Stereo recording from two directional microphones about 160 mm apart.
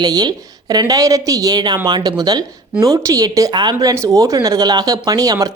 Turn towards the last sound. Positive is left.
turn(degrees=-20)  # may be behind; listen again after turning